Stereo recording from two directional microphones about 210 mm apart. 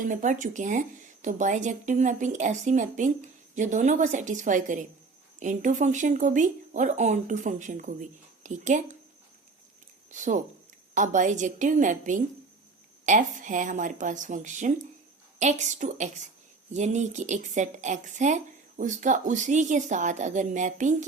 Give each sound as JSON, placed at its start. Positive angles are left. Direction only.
{"t": 0.0, "sound": "speech", "side_deg": -40}
{"t": 10.1, "sound": "speech", "side_deg": -35}